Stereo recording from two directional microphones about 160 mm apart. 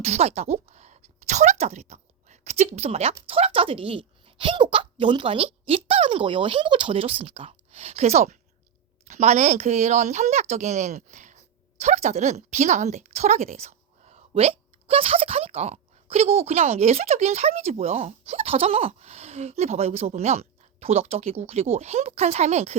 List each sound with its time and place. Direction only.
0.0 s a woman's voice: 40° right (ahead or behind)